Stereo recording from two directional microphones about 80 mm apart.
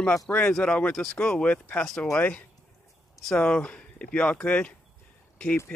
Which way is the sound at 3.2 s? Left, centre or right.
Centre.